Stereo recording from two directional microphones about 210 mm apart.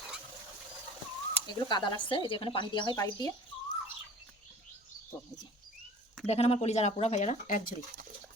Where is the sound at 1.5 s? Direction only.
20° left (ahead or behind).